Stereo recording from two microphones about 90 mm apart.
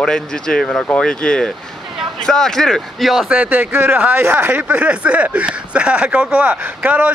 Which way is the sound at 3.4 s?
20° right (ahead or behind).